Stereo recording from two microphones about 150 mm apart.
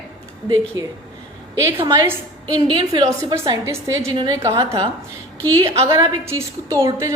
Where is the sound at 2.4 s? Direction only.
25° right (ahead or behind).